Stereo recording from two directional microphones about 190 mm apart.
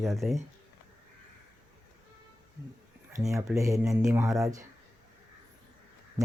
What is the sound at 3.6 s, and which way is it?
Speech, 15° right (ahead or behind).